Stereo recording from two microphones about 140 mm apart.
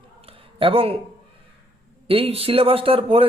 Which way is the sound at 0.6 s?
40° right (ahead or behind).